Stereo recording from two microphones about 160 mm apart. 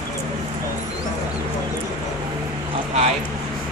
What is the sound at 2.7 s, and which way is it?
Vehicle, 45° right (ahead or behind).